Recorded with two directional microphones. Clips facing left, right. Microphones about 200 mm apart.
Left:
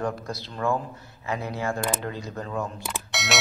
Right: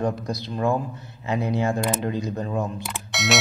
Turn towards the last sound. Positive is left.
turn(degrees=0)  # may be behind; listen again after turning